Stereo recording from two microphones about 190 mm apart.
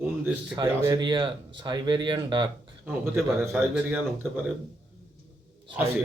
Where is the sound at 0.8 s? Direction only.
20° right (ahead or behind).